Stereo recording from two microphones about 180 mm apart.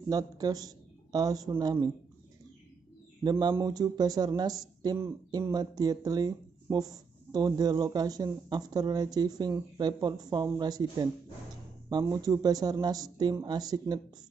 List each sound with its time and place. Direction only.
0.1 s speech: 20° right (ahead or behind)
3.3 s speech: 25° right (ahead or behind)